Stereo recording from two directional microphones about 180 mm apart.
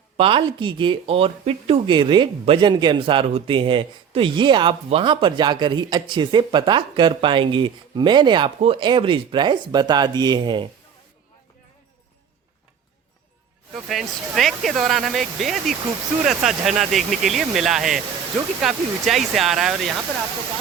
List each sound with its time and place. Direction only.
0.2 s speech: 30° right (ahead or behind)
13.7 s speech: centre (ahead or behind)